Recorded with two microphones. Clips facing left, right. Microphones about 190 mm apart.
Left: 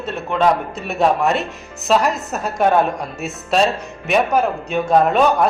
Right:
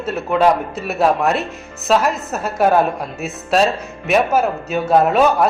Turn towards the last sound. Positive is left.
turn(degrees=-5)  # may be behind; listen again after turning